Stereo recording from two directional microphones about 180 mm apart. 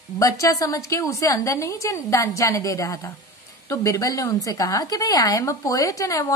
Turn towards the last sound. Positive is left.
turn(degrees=20)  # may be behind; listen again after turning